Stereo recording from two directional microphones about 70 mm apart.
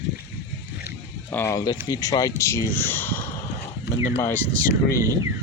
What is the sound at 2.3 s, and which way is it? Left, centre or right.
Speech, left.